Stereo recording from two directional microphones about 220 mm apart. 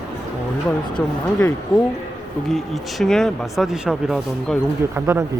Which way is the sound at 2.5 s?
Centre (ahead or behind).